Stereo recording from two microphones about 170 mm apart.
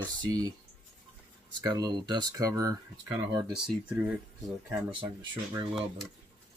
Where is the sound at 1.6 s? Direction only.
25° right (ahead or behind).